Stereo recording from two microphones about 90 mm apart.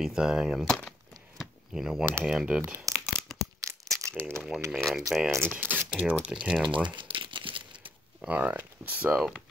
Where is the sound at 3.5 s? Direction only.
35° right (ahead or behind).